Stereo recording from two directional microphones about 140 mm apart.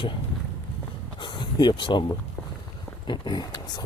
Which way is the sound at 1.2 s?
35° left (ahead or behind).